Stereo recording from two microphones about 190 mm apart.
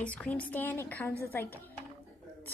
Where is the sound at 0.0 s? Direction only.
5° left (ahead or behind).